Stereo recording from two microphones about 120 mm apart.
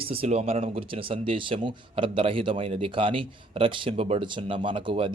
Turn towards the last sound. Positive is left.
turn(degrees=-50)  # may be behind; listen again after turning